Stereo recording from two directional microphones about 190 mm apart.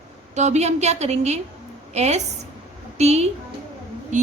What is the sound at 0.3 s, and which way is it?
A woman's voice, 35° right (ahead or behind).